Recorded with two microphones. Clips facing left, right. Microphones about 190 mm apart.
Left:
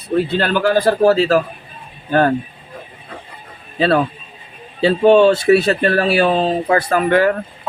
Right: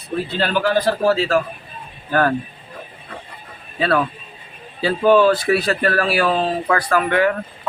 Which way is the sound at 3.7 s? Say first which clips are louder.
Left 4 dB; 25° left (ahead or behind).